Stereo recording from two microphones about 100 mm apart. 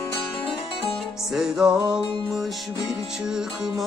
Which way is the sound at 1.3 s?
5° right (ahead or behind).